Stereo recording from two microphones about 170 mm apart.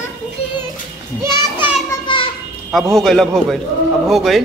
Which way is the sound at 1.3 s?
30° left (ahead or behind).